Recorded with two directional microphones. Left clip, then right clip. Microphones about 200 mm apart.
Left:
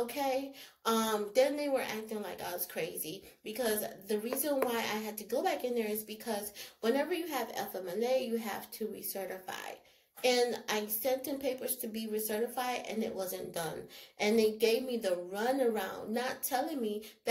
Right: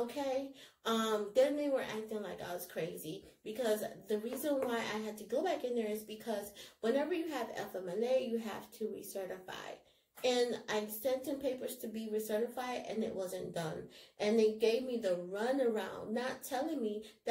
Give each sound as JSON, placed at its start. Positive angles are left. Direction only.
{"t": 0.0, "sound": "a woman's voice", "side_deg": 0}
{"t": 10.2, "sound": "a woman's voice", "side_deg": -5}